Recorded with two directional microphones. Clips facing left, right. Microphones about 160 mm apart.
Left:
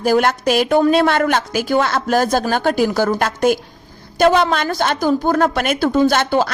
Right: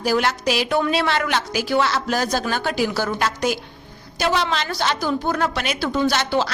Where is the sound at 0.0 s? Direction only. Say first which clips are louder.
Left 5 dB; 50° left (ahead or behind).